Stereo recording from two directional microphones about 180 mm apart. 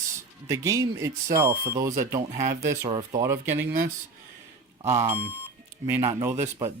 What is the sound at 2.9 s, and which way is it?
Speech, 30° right (ahead or behind).